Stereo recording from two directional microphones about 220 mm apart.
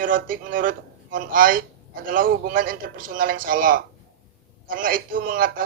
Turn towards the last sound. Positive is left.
turn(degrees=-40)  # may be behind; listen again after turning